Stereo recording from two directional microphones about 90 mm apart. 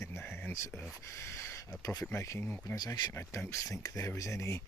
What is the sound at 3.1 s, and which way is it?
Speech, 30° left (ahead or behind).